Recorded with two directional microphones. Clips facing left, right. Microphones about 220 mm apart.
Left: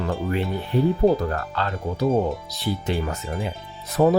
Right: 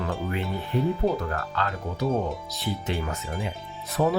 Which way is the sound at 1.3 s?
35° left (ahead or behind).